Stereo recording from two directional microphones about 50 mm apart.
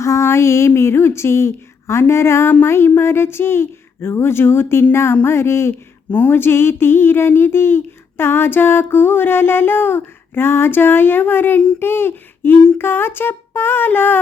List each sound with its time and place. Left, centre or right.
0.0 s music: left
0.7 s speech: left
6.2 s a sound: left